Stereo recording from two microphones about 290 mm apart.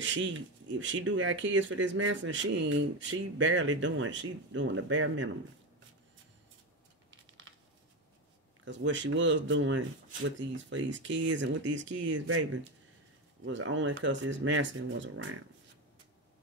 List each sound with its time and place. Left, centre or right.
0.0 s speech: right
7.1 s typing: right
8.6 s speech: right
13.5 s speech: right